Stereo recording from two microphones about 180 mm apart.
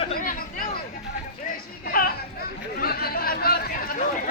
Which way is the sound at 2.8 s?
60° left (ahead or behind).